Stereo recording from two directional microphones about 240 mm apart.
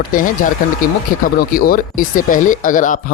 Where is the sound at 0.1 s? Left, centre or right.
Left.